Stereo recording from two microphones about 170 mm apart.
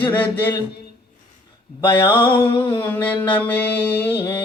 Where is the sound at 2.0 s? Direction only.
15° left (ahead or behind).